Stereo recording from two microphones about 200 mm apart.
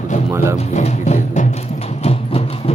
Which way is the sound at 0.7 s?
35° left (ahead or behind).